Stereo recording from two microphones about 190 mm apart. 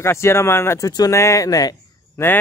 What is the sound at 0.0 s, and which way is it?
Speech, 15° left (ahead or behind).